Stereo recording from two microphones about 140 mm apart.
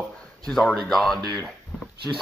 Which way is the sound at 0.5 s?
5° left (ahead or behind).